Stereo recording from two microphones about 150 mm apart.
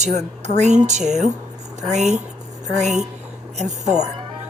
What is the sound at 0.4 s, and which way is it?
A woman's voice, 50° right (ahead or behind).